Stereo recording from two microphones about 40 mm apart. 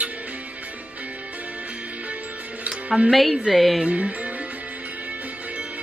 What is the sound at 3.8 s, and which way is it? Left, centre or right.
Speech, right.